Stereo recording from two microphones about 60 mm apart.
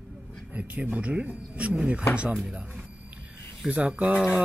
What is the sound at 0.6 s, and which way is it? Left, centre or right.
Speech, right.